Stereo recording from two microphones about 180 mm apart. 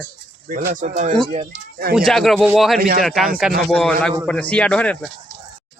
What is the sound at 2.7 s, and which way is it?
Speech, 55° right (ahead or behind).